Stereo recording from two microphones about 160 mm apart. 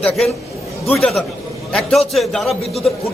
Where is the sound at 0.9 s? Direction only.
5° left (ahead or behind).